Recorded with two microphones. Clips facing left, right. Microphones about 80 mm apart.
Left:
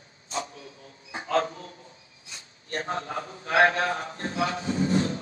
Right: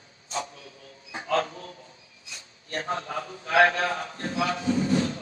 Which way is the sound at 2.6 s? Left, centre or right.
Left.